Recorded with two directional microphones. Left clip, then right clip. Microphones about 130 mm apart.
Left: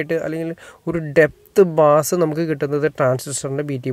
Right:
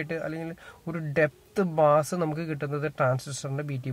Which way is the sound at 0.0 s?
45° left (ahead or behind).